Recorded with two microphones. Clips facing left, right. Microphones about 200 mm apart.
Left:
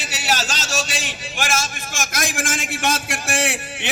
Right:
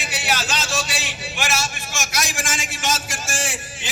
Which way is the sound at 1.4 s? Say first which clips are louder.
Left 1 dB; 50° left (ahead or behind).